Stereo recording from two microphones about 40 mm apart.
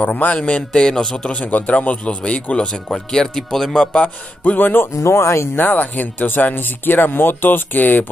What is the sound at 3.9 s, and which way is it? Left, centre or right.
Speech, left.